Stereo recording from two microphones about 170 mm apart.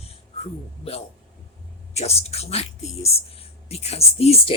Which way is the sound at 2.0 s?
40° left (ahead or behind).